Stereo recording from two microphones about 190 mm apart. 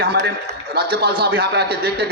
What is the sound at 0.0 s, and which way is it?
A man's voice, 55° right (ahead or behind).